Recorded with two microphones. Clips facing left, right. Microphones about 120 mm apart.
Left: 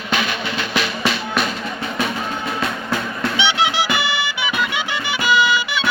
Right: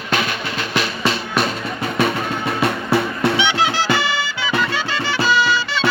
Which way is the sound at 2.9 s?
70° right (ahead or behind).